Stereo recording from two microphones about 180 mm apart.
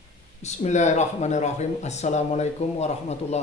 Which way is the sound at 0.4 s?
40° left (ahead or behind).